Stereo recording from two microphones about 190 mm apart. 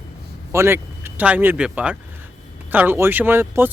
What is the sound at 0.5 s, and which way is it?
Speech, 15° right (ahead or behind).